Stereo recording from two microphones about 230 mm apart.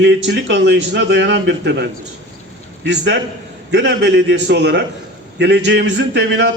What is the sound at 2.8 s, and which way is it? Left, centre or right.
A man's voice, right.